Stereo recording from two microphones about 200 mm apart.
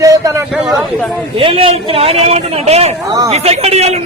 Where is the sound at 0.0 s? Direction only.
15° right (ahead or behind).